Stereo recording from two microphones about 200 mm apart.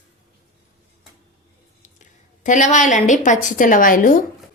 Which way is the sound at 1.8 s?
40° left (ahead or behind).